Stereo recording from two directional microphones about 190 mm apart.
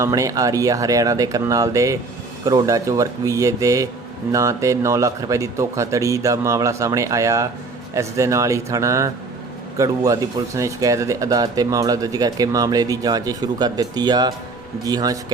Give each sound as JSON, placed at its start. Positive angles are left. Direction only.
{"t": 0.0, "sound": "speech", "side_deg": -15}